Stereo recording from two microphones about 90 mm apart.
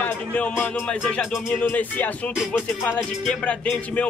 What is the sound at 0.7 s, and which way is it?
Speech, 10° left (ahead or behind).